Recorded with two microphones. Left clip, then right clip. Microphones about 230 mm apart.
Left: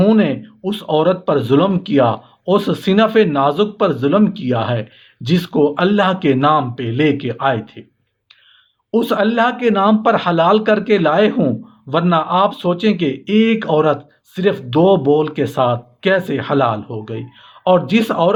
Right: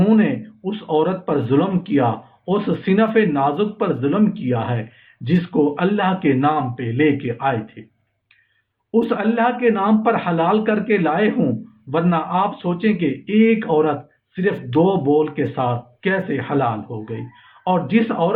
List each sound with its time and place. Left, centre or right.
0.0 s speech: left
8.9 s speech: left